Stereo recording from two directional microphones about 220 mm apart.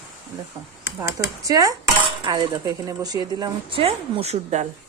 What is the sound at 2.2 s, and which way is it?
Speech, 20° right (ahead or behind).